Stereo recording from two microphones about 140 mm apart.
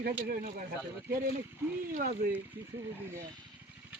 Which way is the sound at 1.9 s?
65° right (ahead or behind).